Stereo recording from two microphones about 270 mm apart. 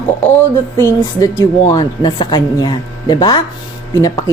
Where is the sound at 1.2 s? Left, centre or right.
Centre.